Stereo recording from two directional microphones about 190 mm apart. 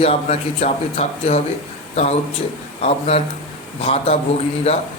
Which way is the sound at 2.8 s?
35° left (ahead or behind).